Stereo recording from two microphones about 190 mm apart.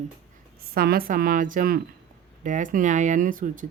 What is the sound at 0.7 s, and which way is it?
Speech, 55° right (ahead or behind).